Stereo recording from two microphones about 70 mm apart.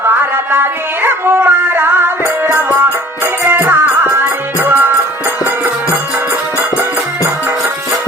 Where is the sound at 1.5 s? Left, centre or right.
Right.